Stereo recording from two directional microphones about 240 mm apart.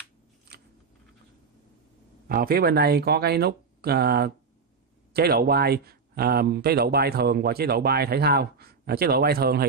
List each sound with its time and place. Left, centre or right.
2.2 s speech: right